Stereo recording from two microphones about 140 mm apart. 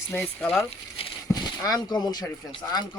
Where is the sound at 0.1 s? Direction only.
10° left (ahead or behind).